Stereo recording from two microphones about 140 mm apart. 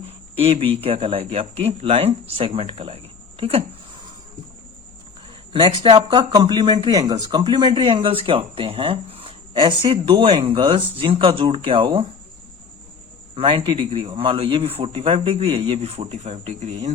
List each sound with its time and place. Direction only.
0.3 s speech: 45° right (ahead or behind)
5.5 s speech: 40° right (ahead or behind)
13.3 s speech: 40° right (ahead or behind); by 16.9 s 55° right (ahead or behind)